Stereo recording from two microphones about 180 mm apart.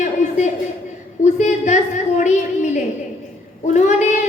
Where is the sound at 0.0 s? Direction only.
40° left (ahead or behind).